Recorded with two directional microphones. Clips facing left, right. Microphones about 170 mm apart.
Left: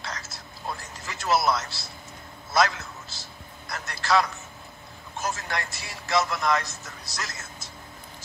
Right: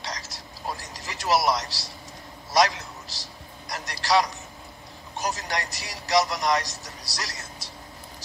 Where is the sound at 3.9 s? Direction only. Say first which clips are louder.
Right 1 dB; 35° right (ahead or behind).